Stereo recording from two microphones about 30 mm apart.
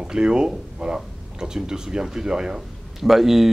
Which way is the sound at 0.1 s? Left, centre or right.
Right.